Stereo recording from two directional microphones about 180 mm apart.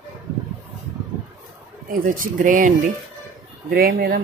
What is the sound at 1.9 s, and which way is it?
Speech, 50° right (ahead or behind).